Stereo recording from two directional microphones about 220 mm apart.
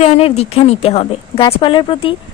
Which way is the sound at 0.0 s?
30° left (ahead or behind).